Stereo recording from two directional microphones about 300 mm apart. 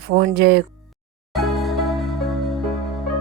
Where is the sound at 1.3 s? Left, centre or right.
Centre.